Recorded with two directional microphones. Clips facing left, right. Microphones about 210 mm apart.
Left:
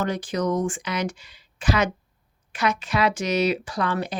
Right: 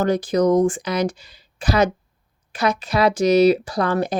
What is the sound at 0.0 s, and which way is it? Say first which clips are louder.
Speech: right 7 dB; 40° right (ahead or behind).